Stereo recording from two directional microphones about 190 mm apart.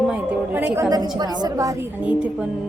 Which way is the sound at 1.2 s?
20° right (ahead or behind).